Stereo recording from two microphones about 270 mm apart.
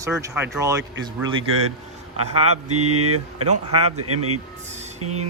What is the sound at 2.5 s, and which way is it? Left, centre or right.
Speech, right.